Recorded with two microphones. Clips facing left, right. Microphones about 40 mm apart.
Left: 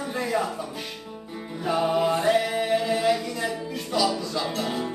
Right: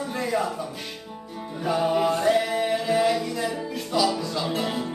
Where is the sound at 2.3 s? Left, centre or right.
Centre.